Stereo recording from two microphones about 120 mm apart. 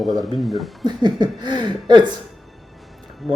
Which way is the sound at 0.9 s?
35° right (ahead or behind).